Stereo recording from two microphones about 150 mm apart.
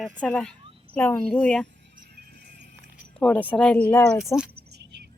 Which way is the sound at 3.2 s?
10° left (ahead or behind).